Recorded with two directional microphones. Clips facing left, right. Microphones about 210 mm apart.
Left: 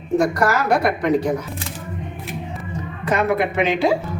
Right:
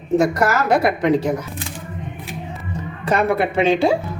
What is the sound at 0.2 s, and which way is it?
A woman's voice, 25° right (ahead or behind).